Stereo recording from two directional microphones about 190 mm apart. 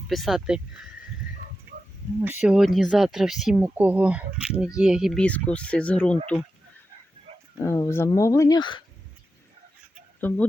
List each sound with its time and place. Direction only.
0.1 s speech: centre (ahead or behind)
2.2 s speech: 10° right (ahead or behind); by 6.1 s 5° left (ahead or behind)
7.5 s speech: 15° left (ahead or behind)
10.2 s speech: 10° left (ahead or behind)